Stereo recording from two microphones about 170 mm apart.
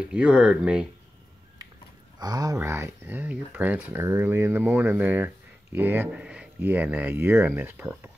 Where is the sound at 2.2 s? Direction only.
20° right (ahead or behind).